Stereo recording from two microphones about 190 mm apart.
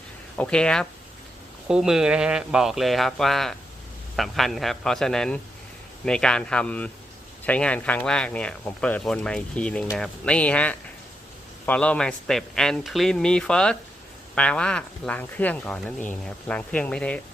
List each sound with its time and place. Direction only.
0.3 s speech: 5° left (ahead or behind)